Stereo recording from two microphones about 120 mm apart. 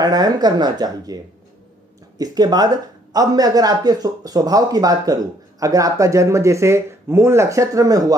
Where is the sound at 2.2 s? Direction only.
35° right (ahead or behind).